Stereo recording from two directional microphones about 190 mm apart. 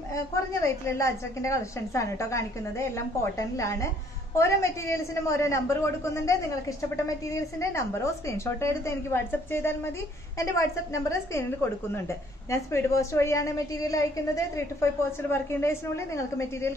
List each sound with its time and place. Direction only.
0.1 s a woman's voice: 15° left (ahead or behind)
7.7 s a woman's voice: 15° left (ahead or behind)
12.4 s a woman's voice: 15° left (ahead or behind)